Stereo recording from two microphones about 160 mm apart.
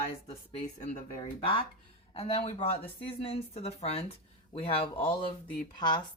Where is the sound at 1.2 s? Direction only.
35° left (ahead or behind).